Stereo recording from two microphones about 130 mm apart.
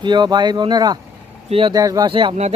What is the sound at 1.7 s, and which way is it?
Speech, 30° right (ahead or behind).